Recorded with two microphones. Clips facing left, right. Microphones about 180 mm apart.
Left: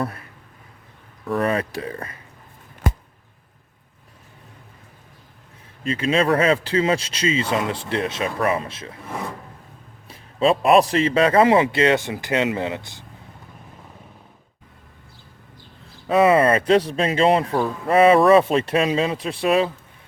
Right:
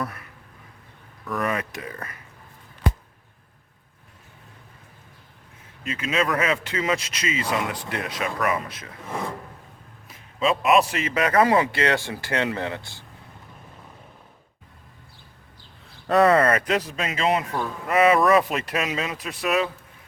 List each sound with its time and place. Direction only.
0.0 s a sound: 30° left (ahead or behind)
1.2 s speech: 30° left (ahead or behind)
5.8 s speech: 30° left (ahead or behind)
10.1 s speech: 35° left (ahead or behind)
16.0 s speech: 5° left (ahead or behind)
16.3 s speech: 25° left (ahead or behind)